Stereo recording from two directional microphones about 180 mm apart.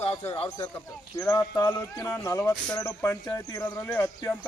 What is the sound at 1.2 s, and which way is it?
Speech, 20° left (ahead or behind).